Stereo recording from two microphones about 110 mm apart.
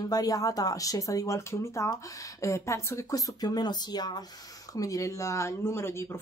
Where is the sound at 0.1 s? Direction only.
35° left (ahead or behind).